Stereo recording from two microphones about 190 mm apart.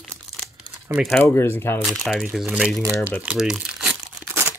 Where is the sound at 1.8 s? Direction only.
Centre (ahead or behind).